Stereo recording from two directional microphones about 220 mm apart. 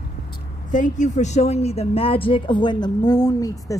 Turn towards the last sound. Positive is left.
turn(degrees=15)  # may be behind; listen again after turning